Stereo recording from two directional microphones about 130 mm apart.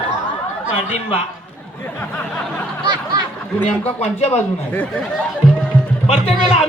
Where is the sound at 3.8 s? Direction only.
50° left (ahead or behind).